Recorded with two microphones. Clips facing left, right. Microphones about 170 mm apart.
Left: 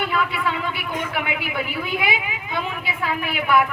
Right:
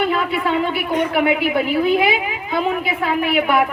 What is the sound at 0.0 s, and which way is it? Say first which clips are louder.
A woman's voice: right 4 dB; 30° right (ahead or behind).